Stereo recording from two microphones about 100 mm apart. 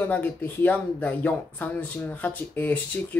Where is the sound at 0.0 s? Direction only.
20° left (ahead or behind).